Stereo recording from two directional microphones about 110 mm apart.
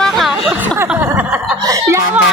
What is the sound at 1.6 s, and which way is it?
Speech, 30° right (ahead or behind).